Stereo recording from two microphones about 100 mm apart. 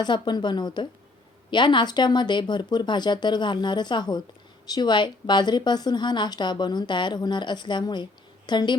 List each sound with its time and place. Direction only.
0.0 s a woman's voice: 45° left (ahead or behind)